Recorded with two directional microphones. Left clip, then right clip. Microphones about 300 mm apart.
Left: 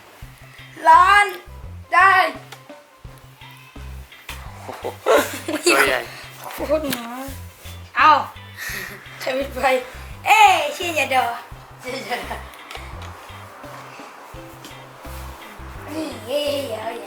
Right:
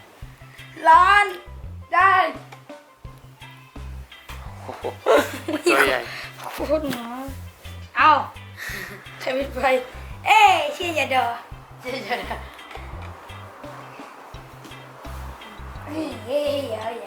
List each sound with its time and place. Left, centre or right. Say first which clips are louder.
0.9 s a child's voice: left 2 dB; centre
4.6 s a sound: left 1 dB; centre
5.0 s speech: left 1 dB; centre
8.5 s a sound: left 3 dB; centre
10.2 s a child's voice: left 2 dB; centre
15.8 s music: left 1 dB; centre
16.7 s a child's voice: left 1 dB; centre